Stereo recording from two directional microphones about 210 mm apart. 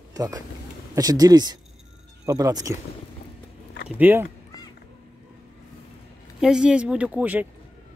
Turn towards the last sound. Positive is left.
turn(degrees=-5)  # may be behind; listen again after turning